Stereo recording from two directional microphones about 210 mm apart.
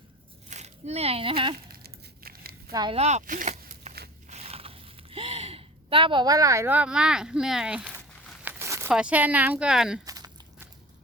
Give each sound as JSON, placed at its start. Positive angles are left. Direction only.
{"t": 0.5, "sound": "speech", "side_deg": -30}
{"t": 1.5, "sound": "a sound", "side_deg": -45}
{"t": 2.7, "sound": "speech", "side_deg": -25}
{"t": 4.3, "sound": "a sound", "side_deg": -30}
{"t": 8.4, "sound": "speech", "side_deg": -10}
{"t": 10.1, "sound": "walk", "side_deg": -15}